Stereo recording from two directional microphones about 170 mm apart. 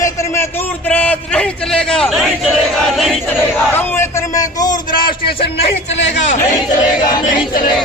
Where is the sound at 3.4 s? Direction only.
10° left (ahead or behind); by 5.3 s 30° left (ahead or behind).